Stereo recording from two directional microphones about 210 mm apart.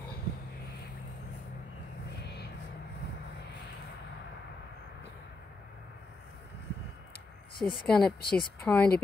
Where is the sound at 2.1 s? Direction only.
55° left (ahead or behind).